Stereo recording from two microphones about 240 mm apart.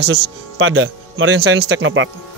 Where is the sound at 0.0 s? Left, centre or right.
Right.